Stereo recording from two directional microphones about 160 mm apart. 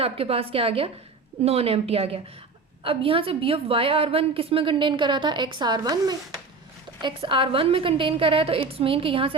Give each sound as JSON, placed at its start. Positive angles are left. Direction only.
{"t": 0.0, "sound": "a woman's voice", "side_deg": -35}